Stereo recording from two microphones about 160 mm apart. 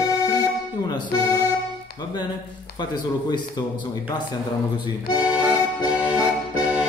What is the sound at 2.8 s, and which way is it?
Speech, 25° left (ahead or behind).